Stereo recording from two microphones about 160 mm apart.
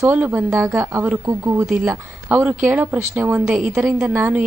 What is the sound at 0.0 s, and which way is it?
A woman's voice, 10° right (ahead or behind).